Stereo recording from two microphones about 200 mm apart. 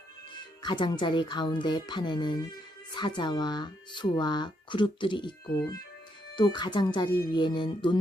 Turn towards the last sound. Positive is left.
turn(degrees=25)  # may be behind; listen again after turning